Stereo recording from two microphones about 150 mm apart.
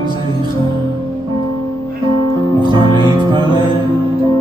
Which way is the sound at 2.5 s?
30° right (ahead or behind).